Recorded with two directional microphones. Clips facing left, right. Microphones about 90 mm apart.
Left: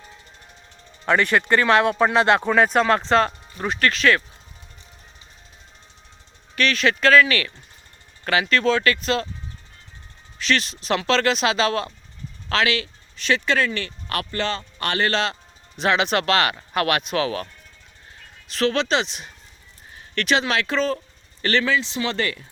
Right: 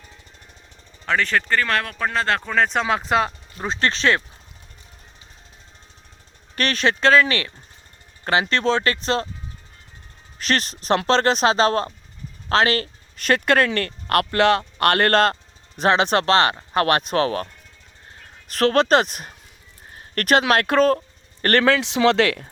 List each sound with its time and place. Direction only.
1.0 s speech: 10° left (ahead or behind)
2.5 s speech: 5° left (ahead or behind)
3.7 s speech: 25° right (ahead or behind)
6.6 s speech: 40° right (ahead or behind)
10.3 s speech: 40° right (ahead or behind)
15.8 s speech: 35° right (ahead or behind)
18.4 s speech: 50° right (ahead or behind)
19.9 s a sound: 45° right (ahead or behind)
20.5 s speech: 50° right (ahead or behind); by 22.4 s 70° right (ahead or behind)